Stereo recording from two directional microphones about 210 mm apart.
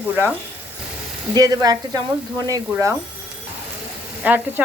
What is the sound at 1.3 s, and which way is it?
Speech, 20° right (ahead or behind).